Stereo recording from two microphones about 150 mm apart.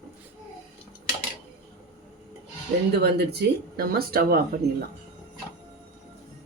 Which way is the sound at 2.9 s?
90° right.